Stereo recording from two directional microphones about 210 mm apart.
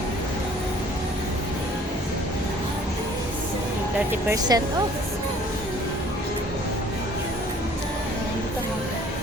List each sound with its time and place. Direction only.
4.3 s speech: 20° right (ahead or behind)